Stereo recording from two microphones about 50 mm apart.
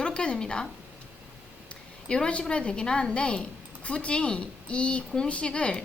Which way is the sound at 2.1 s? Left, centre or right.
Centre.